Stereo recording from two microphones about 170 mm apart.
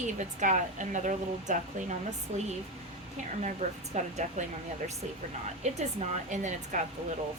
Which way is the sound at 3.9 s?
45° right (ahead or behind).